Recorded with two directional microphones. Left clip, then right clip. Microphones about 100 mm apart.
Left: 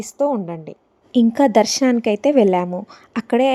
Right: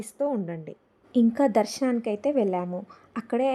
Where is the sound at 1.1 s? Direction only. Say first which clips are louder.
Left 8 dB; 35° left (ahead or behind); by 2.8 s 55° left (ahead or behind).